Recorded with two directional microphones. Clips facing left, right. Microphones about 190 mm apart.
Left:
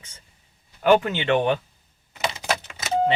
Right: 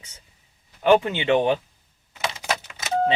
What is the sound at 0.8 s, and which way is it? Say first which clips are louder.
Speech: even; 5° left (ahead or behind).